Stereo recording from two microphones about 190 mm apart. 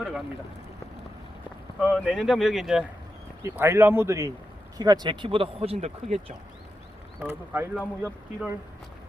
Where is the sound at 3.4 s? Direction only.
15° right (ahead or behind); by 6.3 s 35° right (ahead or behind).